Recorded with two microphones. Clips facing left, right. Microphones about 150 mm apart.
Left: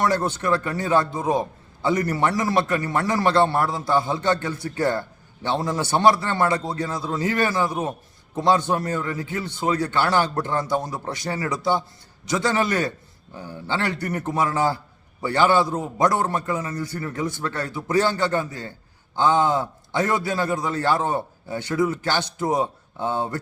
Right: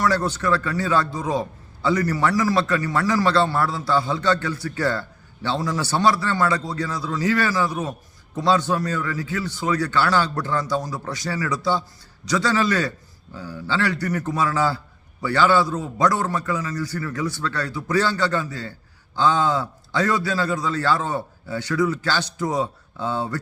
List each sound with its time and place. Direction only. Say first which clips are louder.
0.0 s a man's voice: even; 25° left (ahead or behind)